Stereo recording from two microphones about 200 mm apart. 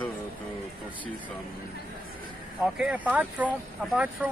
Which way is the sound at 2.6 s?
5° right (ahead or behind).